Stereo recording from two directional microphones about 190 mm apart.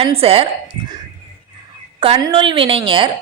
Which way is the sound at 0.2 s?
30° right (ahead or behind).